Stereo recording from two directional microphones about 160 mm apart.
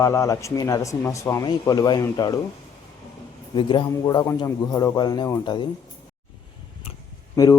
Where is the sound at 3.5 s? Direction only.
30° left (ahead or behind).